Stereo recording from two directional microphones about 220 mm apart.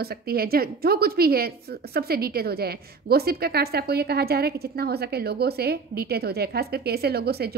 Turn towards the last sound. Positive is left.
turn(degrees=-45)  # may be behind; listen again after turning